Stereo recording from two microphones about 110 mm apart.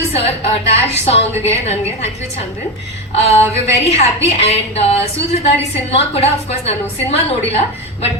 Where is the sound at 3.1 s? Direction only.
65° left (ahead or behind).